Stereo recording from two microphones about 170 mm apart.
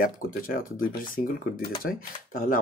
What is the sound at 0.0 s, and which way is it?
Speech, 55° left (ahead or behind).